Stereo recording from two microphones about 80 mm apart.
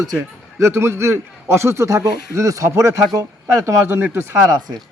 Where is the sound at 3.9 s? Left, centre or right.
Right.